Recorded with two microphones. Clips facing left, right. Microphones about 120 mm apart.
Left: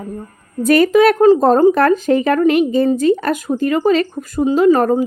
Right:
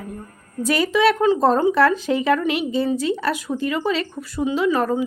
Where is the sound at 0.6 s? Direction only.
50° left (ahead or behind).